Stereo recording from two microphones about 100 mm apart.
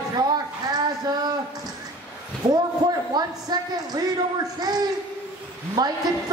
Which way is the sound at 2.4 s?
35° right (ahead or behind).